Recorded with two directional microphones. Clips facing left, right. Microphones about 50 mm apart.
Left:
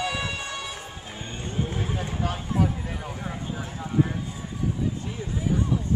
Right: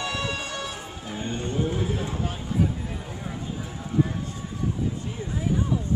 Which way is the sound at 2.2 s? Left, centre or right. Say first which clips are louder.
Left 2 dB; left.